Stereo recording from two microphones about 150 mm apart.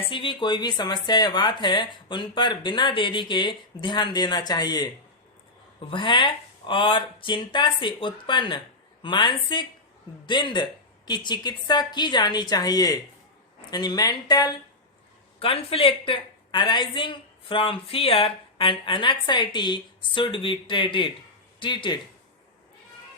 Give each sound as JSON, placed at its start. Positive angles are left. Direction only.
{"t": 0.0, "sound": "speech", "side_deg": 35}
{"t": 5.9, "sound": "speech", "side_deg": 35}
{"t": 15.4, "sound": "speech", "side_deg": 40}